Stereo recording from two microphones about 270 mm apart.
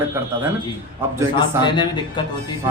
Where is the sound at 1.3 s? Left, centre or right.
Centre.